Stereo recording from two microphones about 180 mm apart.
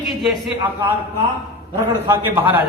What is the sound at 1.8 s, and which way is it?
Speech, 15° right (ahead or behind).